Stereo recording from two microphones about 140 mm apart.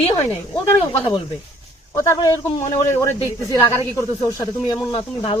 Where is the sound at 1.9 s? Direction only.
25° left (ahead or behind).